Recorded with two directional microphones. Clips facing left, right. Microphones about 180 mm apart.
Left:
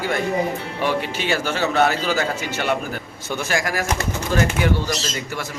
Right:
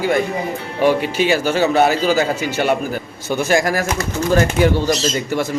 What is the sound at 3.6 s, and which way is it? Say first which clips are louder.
Speech: right 6 dB; 35° right (ahead or behind).